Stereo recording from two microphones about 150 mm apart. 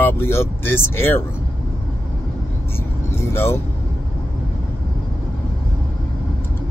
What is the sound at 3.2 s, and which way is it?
Vehicle, 15° left (ahead or behind).